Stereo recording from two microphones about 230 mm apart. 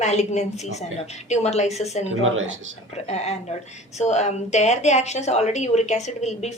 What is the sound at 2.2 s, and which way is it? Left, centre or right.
Speech, right.